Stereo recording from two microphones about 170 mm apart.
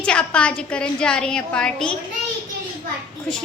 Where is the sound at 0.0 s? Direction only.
5° left (ahead or behind).